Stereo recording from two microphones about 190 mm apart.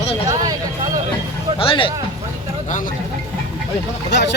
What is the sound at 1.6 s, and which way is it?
Speech, 30° left (ahead or behind).